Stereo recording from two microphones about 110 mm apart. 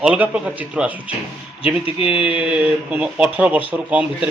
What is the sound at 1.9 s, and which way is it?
Speech, 60° left (ahead or behind).